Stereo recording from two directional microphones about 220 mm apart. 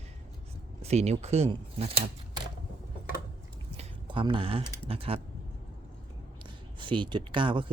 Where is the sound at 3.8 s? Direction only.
25° right (ahead or behind).